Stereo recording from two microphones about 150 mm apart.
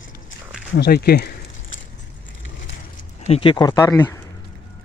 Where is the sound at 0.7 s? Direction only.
90° left.